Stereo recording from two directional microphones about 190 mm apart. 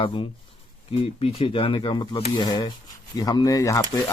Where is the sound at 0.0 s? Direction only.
30° left (ahead or behind).